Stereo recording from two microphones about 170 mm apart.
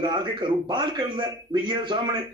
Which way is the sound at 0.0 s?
25° right (ahead or behind).